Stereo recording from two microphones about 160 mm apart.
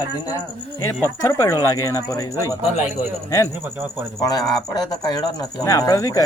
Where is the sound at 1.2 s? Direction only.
20° left (ahead or behind).